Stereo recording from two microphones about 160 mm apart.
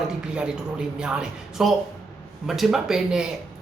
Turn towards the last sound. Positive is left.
turn(degrees=-5)  # may be behind; listen again after turning